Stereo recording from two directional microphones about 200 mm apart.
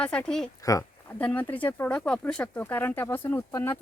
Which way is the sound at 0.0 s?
5° left (ahead or behind).